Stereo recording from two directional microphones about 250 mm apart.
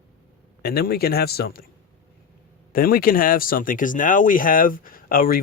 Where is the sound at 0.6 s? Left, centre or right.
Left.